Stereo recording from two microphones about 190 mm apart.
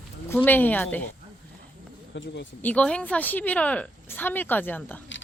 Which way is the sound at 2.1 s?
75° left (ahead or behind).